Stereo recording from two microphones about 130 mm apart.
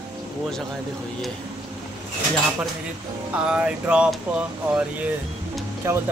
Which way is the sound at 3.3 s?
10° right (ahead or behind).